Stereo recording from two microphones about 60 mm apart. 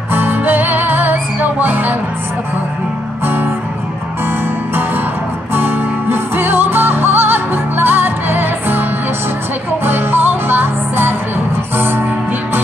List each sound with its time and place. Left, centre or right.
0.1 s music: right
3.3 s music: right
5.5 s music: right
9.8 s music: right